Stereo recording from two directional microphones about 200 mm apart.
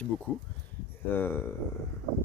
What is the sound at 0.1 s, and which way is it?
Speech, 5° left (ahead or behind).